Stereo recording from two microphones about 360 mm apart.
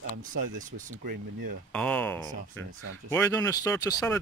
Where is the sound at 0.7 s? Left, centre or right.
Right.